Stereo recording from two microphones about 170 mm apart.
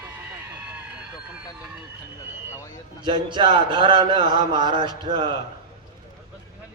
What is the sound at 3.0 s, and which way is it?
A man's voice, 30° right (ahead or behind).